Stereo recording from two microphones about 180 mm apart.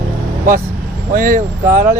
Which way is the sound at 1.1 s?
50° right (ahead or behind).